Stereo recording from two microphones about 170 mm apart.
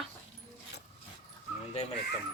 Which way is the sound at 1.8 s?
40° left (ahead or behind).